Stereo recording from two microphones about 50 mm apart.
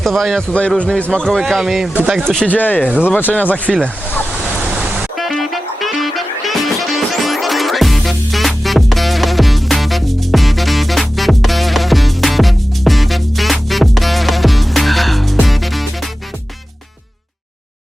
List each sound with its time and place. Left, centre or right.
0.0 s speech: centre
0.4 s a man's voice: left
1.2 s speech: centre
2.5 s speech: left
5.1 s music: centre